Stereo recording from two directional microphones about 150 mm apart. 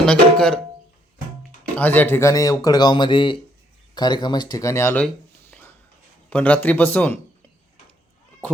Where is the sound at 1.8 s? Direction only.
10° left (ahead or behind).